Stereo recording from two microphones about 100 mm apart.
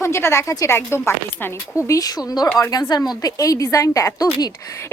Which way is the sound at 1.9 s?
40° left (ahead or behind).